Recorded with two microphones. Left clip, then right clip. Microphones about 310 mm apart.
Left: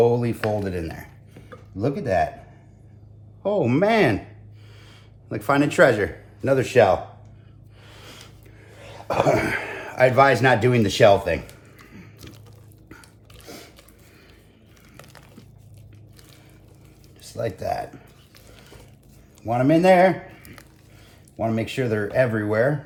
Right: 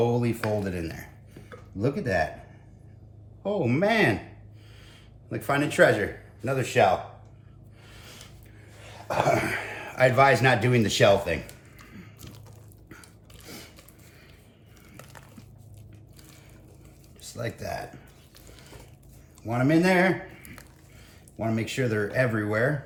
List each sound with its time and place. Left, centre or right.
0.0 s speech: centre
3.4 s speech: centre
6.4 s a man's voice: left
7.9 s a sound: left
8.8 s speech: left
17.3 s speech: centre
19.5 s speech: centre
21.3 s speech: centre